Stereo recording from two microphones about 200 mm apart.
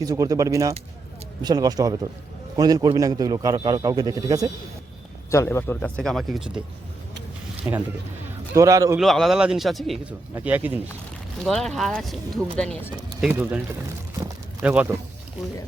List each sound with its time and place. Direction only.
0.0 s a man's voice: 15° right (ahead or behind)
5.3 s a man's voice: 15° left (ahead or behind); by 6.6 s centre (ahead or behind)
8.5 s speech: 15° right (ahead or behind)
9.0 s a man's voice: centre (ahead or behind)
14.6 s speech: 5° right (ahead or behind)